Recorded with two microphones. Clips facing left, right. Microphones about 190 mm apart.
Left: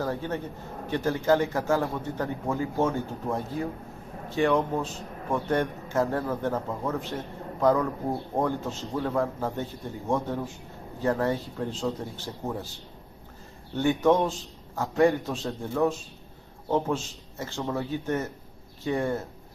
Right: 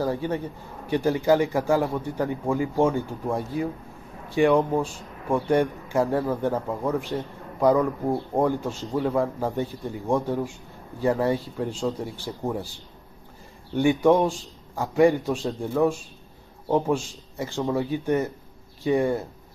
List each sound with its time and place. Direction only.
0.0 s a man's voice: 10° right (ahead or behind)
8.4 s a man's voice: 10° right (ahead or behind)
13.7 s a man's voice: 15° right (ahead or behind)